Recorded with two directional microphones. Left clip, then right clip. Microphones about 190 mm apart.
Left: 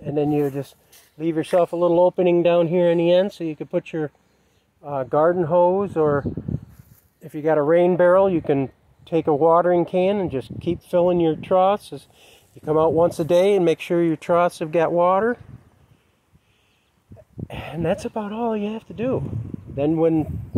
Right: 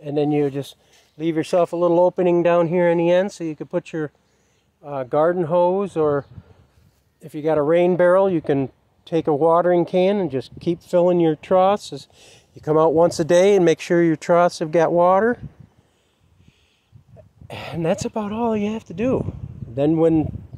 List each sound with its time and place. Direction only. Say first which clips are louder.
0.0 s speech: right 1 dB; 25° right (ahead or behind)
3.3 s speech: even; 50° right (ahead or behind)
3.5 s speech: even; 15° right (ahead or behind)
7.2 s speech: even; 30° right (ahead or behind)
17.5 s speech: right 1 dB; 30° right (ahead or behind)